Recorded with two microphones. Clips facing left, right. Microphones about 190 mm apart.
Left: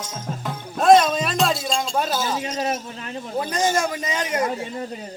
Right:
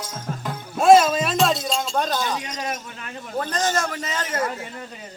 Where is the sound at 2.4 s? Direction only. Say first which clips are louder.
Left 5 dB; 30° left (ahead or behind).